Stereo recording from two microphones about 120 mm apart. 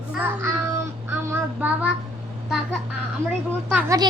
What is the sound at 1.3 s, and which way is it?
Child singing, 10° right (ahead or behind).